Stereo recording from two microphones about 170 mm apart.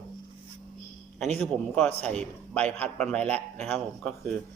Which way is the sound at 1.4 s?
10° left (ahead or behind).